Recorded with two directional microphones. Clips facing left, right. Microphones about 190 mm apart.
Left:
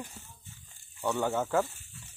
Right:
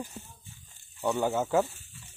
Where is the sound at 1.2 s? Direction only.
10° right (ahead or behind).